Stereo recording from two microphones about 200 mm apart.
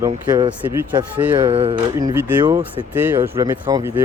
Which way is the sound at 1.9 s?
15° right (ahead or behind).